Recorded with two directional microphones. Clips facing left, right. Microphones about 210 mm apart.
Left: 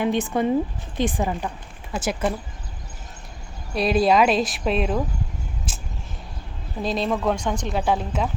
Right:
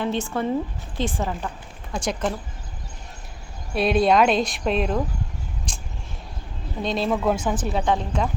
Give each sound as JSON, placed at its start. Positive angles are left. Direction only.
{"t": 0.0, "sound": "a woman's voice", "side_deg": 15}
{"t": 3.8, "sound": "a woman's voice", "side_deg": 0}
{"t": 5.7, "sound": "vehicle", "side_deg": 5}
{"t": 6.8, "sound": "a woman's voice", "side_deg": 0}